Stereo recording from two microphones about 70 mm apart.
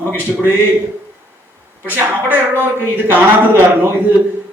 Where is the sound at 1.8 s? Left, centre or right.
Right.